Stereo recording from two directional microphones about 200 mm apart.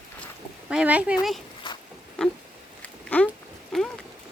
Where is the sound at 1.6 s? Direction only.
25° left (ahead or behind).